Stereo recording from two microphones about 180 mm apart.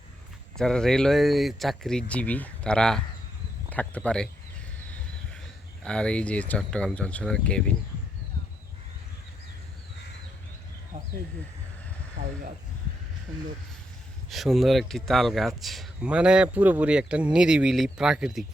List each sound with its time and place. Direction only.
0.5 s speech: 5° left (ahead or behind)
5.8 s speech: 5° left (ahead or behind)
10.9 s a sound: 45° right (ahead or behind)
14.3 s speech: centre (ahead or behind)